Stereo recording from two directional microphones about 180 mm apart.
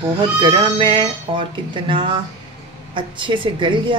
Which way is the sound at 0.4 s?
30° right (ahead or behind).